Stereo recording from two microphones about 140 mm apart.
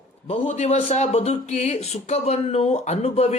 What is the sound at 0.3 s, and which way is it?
Speech, 50° left (ahead or behind).